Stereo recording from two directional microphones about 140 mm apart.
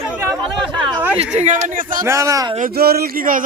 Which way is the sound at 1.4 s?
70° right (ahead or behind).